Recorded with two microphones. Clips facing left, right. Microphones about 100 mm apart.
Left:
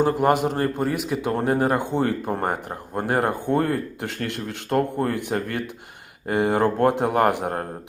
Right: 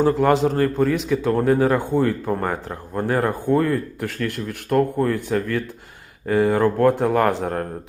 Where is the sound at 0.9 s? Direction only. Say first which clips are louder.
Right 4 dB; 10° left (ahead or behind).